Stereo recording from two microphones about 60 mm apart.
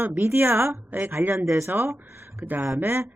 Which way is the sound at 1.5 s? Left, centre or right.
Right.